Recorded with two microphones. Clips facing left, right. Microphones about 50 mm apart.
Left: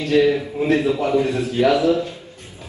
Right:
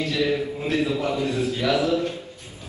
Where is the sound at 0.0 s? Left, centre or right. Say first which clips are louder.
Left 7 dB; left.